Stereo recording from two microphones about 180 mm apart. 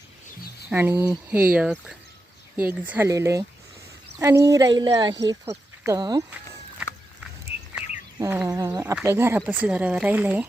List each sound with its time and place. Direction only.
0.7 s speech: 10° right (ahead or behind)
8.2 s speech: 15° right (ahead or behind)